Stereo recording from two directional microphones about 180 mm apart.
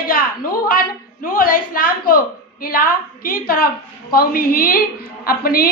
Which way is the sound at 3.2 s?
55° left (ahead or behind).